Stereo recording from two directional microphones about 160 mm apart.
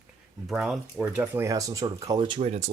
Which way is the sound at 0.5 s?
5° right (ahead or behind).